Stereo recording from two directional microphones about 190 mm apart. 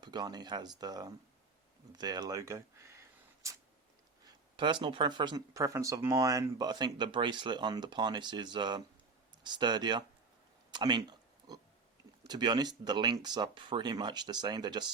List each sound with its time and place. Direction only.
0.0 s speech: 20° right (ahead or behind)
4.5 s speech: 25° right (ahead or behind)
12.3 s speech: 20° right (ahead or behind)